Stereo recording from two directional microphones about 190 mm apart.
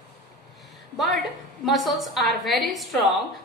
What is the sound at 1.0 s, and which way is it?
A woman's voice, centre (ahead or behind).